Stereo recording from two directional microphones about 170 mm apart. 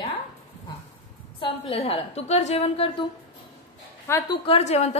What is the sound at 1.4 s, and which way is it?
A woman's voice, 35° left (ahead or behind).